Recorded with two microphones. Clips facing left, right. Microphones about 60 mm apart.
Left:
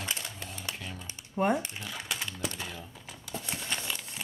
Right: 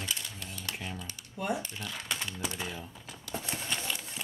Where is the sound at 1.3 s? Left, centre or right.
Left.